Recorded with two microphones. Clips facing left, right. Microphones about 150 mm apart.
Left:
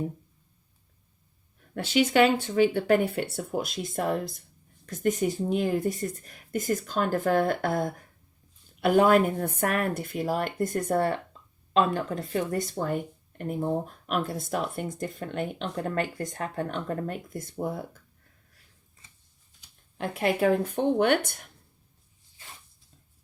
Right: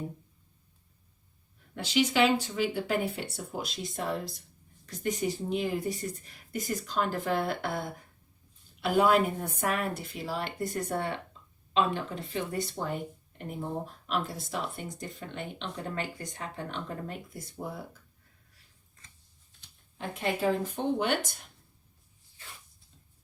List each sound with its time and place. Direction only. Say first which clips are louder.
1.7 s speech: left 4 dB; 50° left (ahead or behind)
20.0 s a woman's voice: left 6 dB; 60° left (ahead or behind)